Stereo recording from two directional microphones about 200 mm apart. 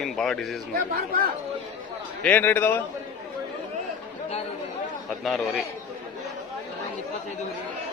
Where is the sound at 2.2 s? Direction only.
10° left (ahead or behind).